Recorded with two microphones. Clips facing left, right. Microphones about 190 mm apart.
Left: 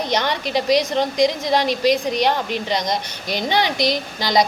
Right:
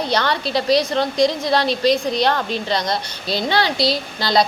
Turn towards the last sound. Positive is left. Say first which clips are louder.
# even
turn(degrees=15)  # may be behind; listen again after turning